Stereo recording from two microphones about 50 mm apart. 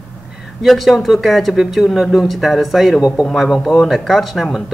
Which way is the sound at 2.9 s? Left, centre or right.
Centre.